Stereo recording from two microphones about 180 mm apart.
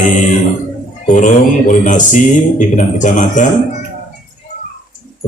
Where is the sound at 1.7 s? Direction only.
45° left (ahead or behind).